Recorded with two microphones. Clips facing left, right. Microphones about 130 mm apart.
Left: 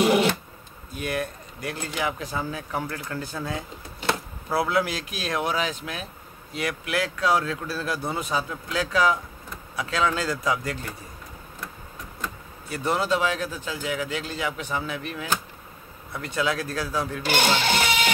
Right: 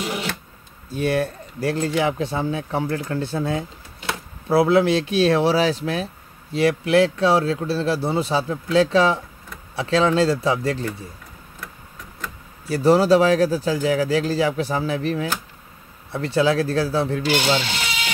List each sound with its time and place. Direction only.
0.0 s a sound: 60° left (ahead or behind)
0.8 s speech: 30° right (ahead or behind)
12.6 s speech: 35° right (ahead or behind)
17.2 s speech: 50° left (ahead or behind)